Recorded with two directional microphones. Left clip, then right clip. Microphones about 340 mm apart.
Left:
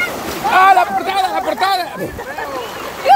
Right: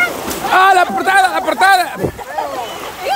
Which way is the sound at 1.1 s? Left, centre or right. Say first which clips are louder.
Right 4 dB; centre.